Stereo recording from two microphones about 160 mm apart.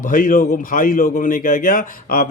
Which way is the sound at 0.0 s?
55° left (ahead or behind).